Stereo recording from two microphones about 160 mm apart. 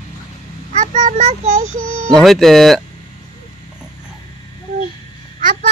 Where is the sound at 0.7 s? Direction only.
50° right (ahead or behind).